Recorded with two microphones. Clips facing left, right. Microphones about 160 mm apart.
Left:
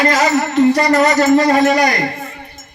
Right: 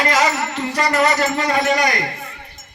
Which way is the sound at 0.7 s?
40° left (ahead or behind).